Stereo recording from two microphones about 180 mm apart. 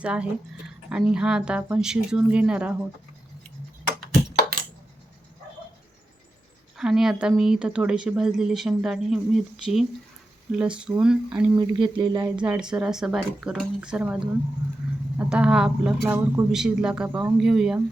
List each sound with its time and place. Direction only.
0.0 s a woman's voice: 5° right (ahead or behind)
6.7 s a woman's voice: centre (ahead or behind)
11.5 s a sound: 25° right (ahead or behind)
12.4 s a woman's voice: 5° right (ahead or behind)
15.2 s a woman's voice: 5° right (ahead or behind)